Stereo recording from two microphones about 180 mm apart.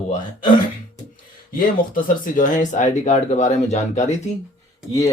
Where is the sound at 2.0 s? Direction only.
50° left (ahead or behind).